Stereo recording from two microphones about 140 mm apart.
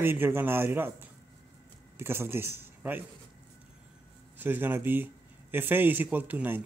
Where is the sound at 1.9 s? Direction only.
15° right (ahead or behind).